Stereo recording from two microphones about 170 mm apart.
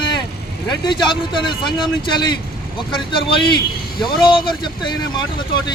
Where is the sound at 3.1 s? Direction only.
30° left (ahead or behind).